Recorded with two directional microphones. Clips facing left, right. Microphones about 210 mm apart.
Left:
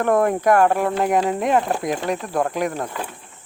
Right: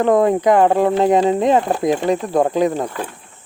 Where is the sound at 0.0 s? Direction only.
20° right (ahead or behind).